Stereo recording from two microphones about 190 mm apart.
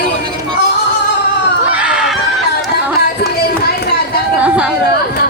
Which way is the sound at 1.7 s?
5° right (ahead or behind).